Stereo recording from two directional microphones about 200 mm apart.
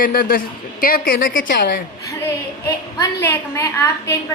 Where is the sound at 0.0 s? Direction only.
45° left (ahead or behind).